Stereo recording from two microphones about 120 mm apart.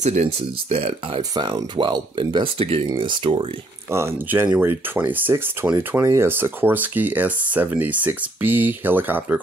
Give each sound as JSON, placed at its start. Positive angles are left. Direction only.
{"t": 0.0, "sound": "speech", "side_deg": -70}
{"t": 1.3, "sound": "speech", "side_deg": -40}
{"t": 3.9, "sound": "speech", "side_deg": -20}